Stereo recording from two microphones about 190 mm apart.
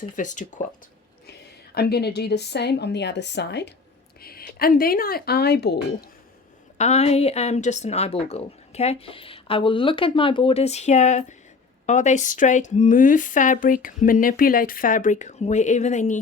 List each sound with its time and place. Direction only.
0.0 s speech: 40° left (ahead or behind)
1.3 s a woman's voice: 55° left (ahead or behind)
4.2 s a sound: 55° left (ahead or behind)
4.5 s speech: 50° left (ahead or behind)
6.7 s speech: 35° left (ahead or behind)